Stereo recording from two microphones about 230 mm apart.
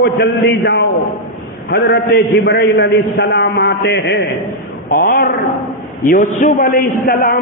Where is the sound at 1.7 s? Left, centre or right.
Left.